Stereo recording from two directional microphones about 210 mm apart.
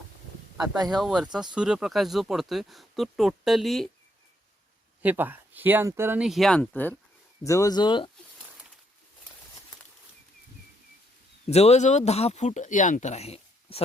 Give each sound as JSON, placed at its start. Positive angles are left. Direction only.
{"t": 0.5, "sound": "speech", "side_deg": -5}
{"t": 5.0, "sound": "speech", "side_deg": -10}
{"t": 11.4, "sound": "speech", "side_deg": 30}